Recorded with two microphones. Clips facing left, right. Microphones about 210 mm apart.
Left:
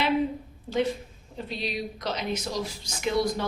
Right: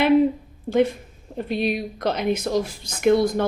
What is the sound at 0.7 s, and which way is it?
Speech, 55° right (ahead or behind).